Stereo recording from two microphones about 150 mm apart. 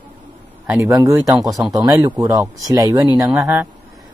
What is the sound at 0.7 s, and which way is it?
Speech, 20° right (ahead or behind).